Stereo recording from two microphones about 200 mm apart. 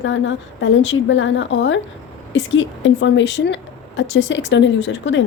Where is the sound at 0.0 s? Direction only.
70° left (ahead or behind).